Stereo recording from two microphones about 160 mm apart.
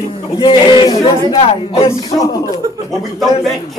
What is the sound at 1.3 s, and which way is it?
Speech, 35° left (ahead or behind).